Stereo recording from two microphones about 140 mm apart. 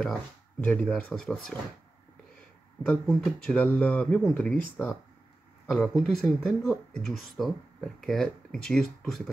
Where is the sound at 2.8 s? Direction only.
5° left (ahead or behind).